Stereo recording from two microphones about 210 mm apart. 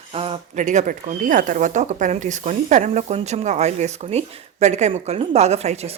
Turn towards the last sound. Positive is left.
turn(degrees=-30)  # may be behind; listen again after turning